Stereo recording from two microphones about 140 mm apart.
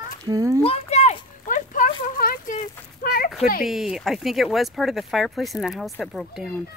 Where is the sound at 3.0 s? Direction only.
90° left.